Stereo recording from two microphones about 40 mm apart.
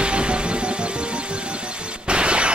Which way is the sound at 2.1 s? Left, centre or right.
Right.